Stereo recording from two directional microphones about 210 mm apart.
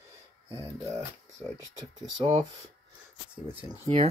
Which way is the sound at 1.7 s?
25° right (ahead or behind).